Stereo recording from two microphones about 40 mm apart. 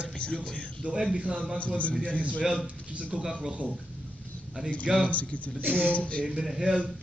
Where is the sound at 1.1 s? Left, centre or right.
Right.